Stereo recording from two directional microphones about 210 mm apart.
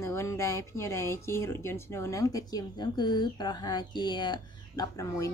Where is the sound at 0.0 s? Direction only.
15° left (ahead or behind).